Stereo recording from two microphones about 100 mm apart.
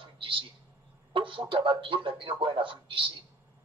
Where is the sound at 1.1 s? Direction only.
60° right (ahead or behind).